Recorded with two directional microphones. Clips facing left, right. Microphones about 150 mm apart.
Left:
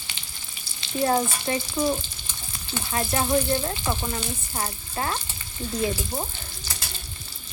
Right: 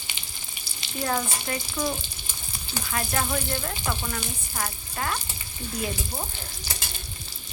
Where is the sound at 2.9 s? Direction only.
25° left (ahead or behind).